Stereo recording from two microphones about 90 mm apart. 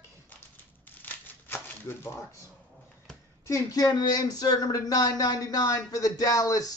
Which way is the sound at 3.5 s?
40° left (ahead or behind).